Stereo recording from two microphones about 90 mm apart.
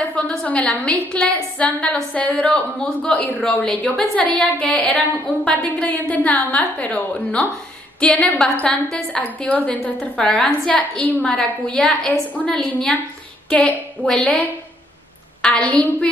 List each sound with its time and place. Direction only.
0.1 s a woman's voice: 10° left (ahead or behind)